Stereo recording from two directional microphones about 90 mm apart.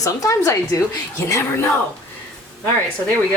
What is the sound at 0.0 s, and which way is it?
Speech, 35° left (ahead or behind).